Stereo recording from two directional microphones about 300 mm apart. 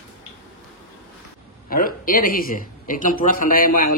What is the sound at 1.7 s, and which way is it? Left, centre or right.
Speech, left.